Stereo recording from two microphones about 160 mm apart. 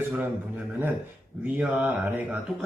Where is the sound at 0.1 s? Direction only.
10° right (ahead or behind).